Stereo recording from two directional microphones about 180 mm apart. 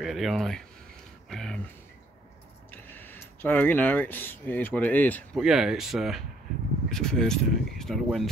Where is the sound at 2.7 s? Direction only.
10° left (ahead or behind).